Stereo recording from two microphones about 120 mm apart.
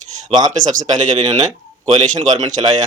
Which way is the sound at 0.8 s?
90° right.